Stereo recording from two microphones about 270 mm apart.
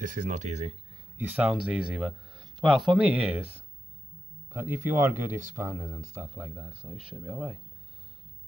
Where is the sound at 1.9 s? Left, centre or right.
Centre.